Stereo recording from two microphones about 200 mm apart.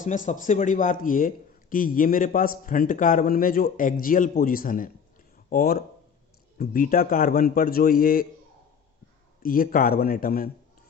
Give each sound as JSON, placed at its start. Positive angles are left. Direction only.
{"t": 0.0, "sound": "a man's voice", "side_deg": 40}
{"t": 9.4, "sound": "a man's voice", "side_deg": 45}